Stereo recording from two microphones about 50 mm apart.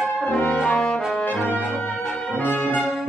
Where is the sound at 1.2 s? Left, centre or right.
Left.